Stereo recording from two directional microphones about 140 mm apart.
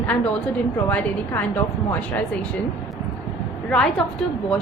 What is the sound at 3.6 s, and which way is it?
Speech, 5° left (ahead or behind).